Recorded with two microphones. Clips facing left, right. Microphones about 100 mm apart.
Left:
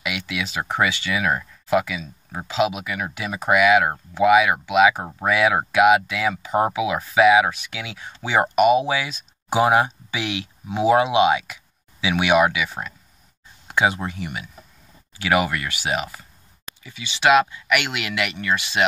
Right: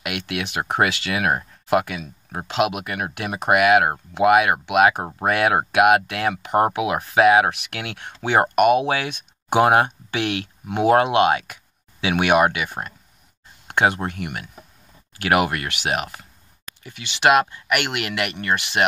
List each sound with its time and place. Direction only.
0.0 s speech: 60° right (ahead or behind)
7.6 s speech: 65° right (ahead or behind)